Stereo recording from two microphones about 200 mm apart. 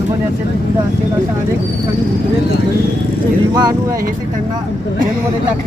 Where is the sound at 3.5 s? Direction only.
20° right (ahead or behind).